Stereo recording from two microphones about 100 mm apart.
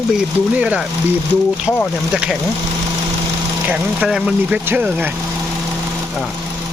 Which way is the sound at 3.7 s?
5° right (ahead or behind).